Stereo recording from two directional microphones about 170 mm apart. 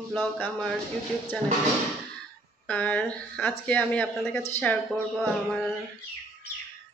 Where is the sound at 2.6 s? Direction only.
10° left (ahead or behind).